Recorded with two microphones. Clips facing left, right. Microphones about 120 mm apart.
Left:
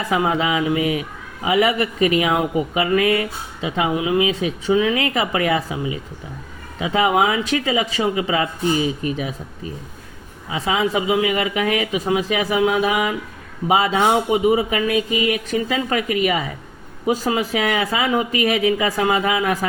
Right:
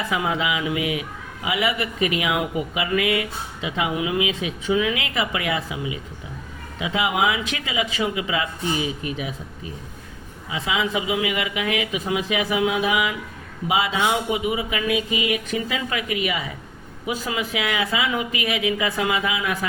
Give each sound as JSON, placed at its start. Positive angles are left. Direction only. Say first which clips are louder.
{"t": 0.0, "sound": "speech", "louder": "left 4 dB", "side_deg": 40}
{"t": 10.5, "sound": "speech", "louder": "left 4 dB", "side_deg": 40}